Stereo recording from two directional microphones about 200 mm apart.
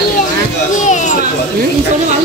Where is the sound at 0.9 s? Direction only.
40° left (ahead or behind).